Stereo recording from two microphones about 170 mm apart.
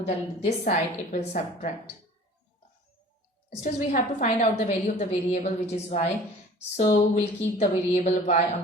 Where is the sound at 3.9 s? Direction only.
45° left (ahead or behind).